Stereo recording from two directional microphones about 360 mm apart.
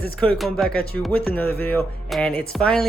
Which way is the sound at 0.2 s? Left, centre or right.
Centre.